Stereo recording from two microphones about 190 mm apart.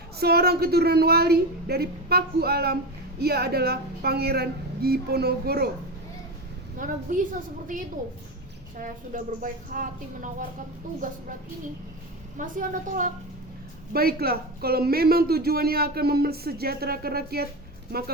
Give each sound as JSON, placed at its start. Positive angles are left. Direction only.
{"t": 0.2, "sound": "a woman's voice", "side_deg": -55}
{"t": 6.7, "sound": "a man's voice", "side_deg": -45}
{"t": 8.8, "sound": "a man's voice", "side_deg": -45}
{"t": 12.4, "sound": "a man's voice", "side_deg": -45}